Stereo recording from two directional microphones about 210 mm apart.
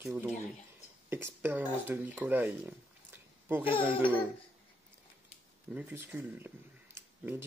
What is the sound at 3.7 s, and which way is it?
Speech, 25° left (ahead or behind).